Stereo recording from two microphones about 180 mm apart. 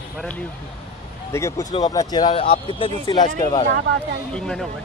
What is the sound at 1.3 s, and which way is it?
Speech, 15° left (ahead or behind).